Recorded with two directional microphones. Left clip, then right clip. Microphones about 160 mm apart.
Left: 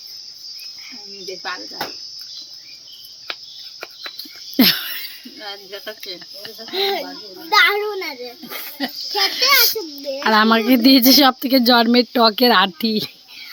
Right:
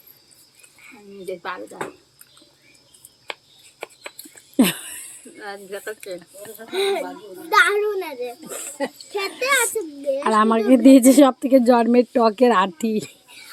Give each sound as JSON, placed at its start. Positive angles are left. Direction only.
{"t": 4.5, "sound": "a sound", "side_deg": 0}
{"t": 5.4, "sound": "speech", "side_deg": 50}
{"t": 6.7, "sound": "a child's voice", "side_deg": -20}
{"t": 7.5, "sound": "a child's voice", "side_deg": 5}
{"t": 10.2, "sound": "a woman's voice", "side_deg": 5}